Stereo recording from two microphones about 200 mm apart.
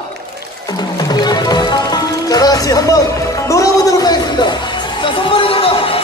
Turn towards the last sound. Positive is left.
turn(degrees=30)  # may be behind; listen again after turning